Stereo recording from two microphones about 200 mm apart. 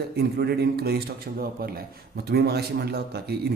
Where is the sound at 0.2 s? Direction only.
55° right (ahead or behind).